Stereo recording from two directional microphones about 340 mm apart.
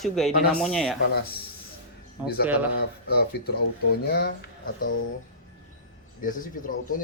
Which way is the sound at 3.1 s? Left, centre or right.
Left.